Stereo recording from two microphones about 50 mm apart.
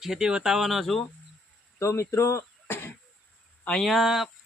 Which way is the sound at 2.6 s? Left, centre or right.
Left.